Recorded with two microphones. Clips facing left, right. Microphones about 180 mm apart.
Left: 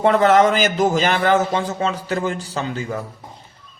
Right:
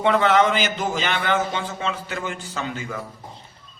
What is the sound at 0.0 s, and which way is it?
A man's voice, 40° left (ahead or behind).